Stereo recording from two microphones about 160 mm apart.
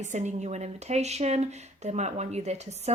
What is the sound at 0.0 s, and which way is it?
Speech, 45° right (ahead or behind).